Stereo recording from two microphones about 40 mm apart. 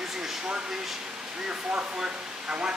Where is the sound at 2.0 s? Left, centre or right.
Right.